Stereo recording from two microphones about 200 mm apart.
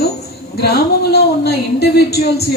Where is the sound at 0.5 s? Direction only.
55° left (ahead or behind).